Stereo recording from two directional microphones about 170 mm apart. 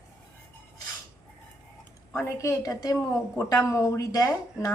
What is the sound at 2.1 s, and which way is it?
Speech, 15° left (ahead or behind).